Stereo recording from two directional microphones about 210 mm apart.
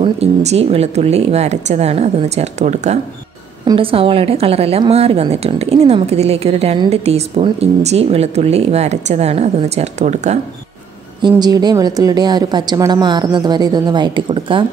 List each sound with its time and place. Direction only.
0.0 s a woman's voice: 30° right (ahead or behind)
11.1 s a woman's voice: 20° right (ahead or behind)